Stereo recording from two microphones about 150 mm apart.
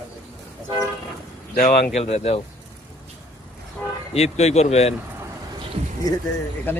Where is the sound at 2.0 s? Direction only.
45° left (ahead or behind).